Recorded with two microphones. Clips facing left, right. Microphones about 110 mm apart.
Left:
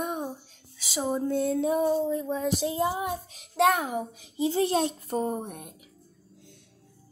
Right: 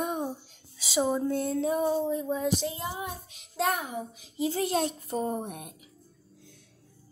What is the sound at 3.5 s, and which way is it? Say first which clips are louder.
Speech: left 6 dB; 90° left.